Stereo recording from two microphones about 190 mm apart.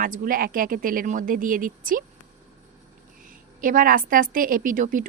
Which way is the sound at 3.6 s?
45° right (ahead or behind).